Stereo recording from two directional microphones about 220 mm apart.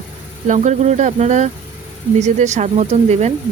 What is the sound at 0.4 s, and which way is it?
Speech, 35° right (ahead or behind).